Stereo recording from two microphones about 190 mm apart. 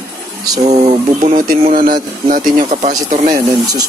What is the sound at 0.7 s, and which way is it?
Speech, 35° right (ahead or behind).